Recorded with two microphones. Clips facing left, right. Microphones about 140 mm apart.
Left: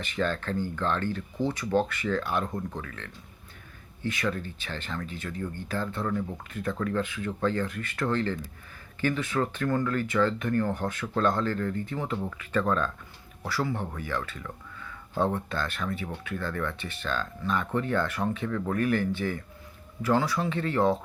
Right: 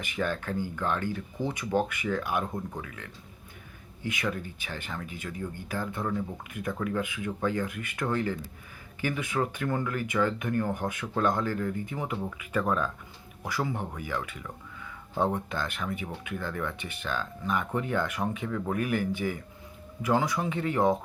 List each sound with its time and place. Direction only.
0.0 s speech: 15° right (ahead or behind)